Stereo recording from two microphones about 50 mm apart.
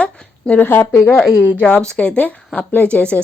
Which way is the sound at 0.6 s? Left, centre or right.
Left.